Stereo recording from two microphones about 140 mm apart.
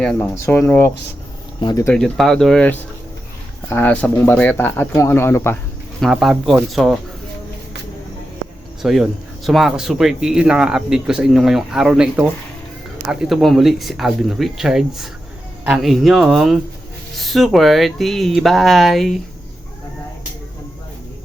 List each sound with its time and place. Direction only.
0.0 s speech: 5° left (ahead or behind)
0.3 s speech: 20° left (ahead or behind)
1.9 s speech: 5° left (ahead or behind)
6.0 s speech: centre (ahead or behind)
8.8 s speech: centre (ahead or behind)